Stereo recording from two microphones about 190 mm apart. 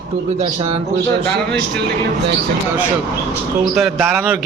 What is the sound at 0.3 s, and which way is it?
Speech, 30° right (ahead or behind).